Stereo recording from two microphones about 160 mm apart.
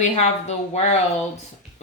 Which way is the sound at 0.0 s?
45° left (ahead or behind).